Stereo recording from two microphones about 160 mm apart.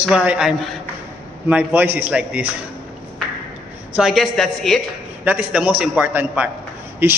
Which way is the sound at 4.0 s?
Centre (ahead or behind).